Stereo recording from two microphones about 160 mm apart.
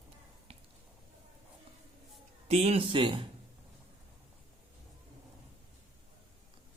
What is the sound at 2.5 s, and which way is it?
Speech, 40° right (ahead or behind).